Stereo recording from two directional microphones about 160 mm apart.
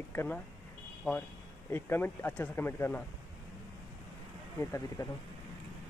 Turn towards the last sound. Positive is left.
turn(degrees=15)  # may be behind; listen again after turning